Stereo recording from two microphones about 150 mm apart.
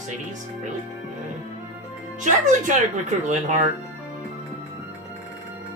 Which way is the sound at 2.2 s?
55° right (ahead or behind).